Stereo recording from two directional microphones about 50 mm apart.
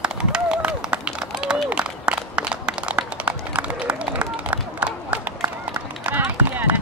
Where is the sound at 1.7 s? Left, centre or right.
Right.